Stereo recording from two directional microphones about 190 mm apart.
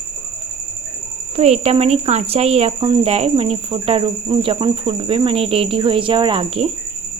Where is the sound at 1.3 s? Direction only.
35° right (ahead or behind).